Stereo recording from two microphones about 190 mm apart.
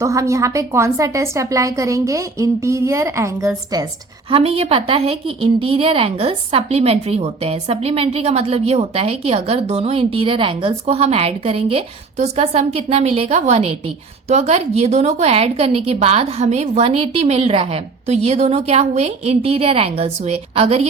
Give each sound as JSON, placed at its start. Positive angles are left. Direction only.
{"t": 0.0, "sound": "a woman's voice", "side_deg": -15}
{"t": 4.3, "sound": "a woman's voice", "side_deg": -30}